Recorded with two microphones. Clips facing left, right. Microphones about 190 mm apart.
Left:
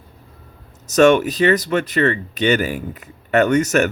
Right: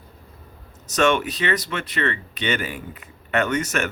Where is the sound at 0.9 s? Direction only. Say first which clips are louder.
Left 8 dB; 40° left (ahead or behind).